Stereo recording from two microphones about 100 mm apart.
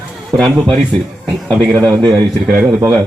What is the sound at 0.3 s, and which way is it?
A man's voice, centre (ahead or behind).